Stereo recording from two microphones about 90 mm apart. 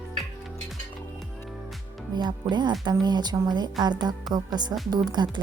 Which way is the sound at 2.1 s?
55° right (ahead or behind).